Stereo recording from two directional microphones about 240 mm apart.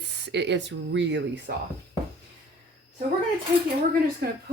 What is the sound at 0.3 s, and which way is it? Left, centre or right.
Speech, right.